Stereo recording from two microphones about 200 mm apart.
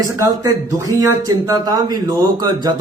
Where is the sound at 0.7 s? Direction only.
15° right (ahead or behind).